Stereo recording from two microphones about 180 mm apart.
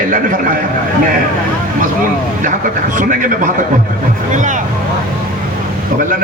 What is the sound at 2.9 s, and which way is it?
Speech, 50° right (ahead or behind).